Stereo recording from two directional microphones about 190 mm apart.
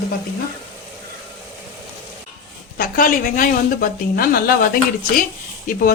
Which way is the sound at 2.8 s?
50° left (ahead or behind).